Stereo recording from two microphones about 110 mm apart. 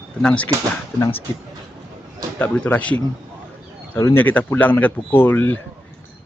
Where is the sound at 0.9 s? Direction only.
20° left (ahead or behind).